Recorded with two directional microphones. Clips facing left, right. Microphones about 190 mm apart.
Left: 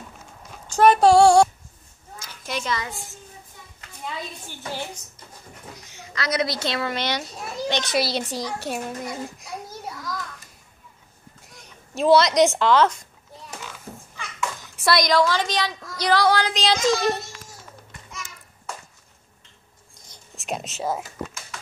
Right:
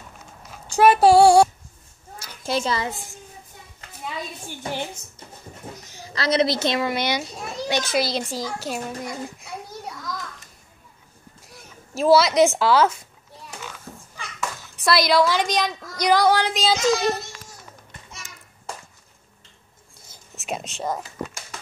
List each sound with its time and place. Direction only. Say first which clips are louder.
0.7 s a woman's voice: right 1 dB; 5° right (ahead or behind)
2.4 s a child's voice: right 4 dB; 30° right (ahead or behind)
4.5 s a woman's voice: right 4 dB; 15° right (ahead or behind)
5.9 s a woman's voice: right 4 dB; 35° right (ahead or behind); by 7.2 s 10° right (ahead or behind)
7.3 s a child's voice: right 1 dB; 5° left (ahead or behind)
11.4 s speech: right 4 dB; centre (ahead or behind)
14.8 s a woman's voice: right 1 dB; centre (ahead or behind)
16.5 s speech: right 1 dB; 5° right (ahead or behind)
20.0 s whispering: right 1 dB; 5° right (ahead or behind)